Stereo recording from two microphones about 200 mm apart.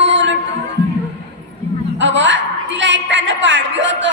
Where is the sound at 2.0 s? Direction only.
65° right (ahead or behind).